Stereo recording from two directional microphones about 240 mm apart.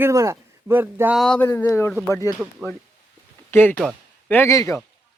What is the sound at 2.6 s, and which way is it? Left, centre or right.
Speech, centre.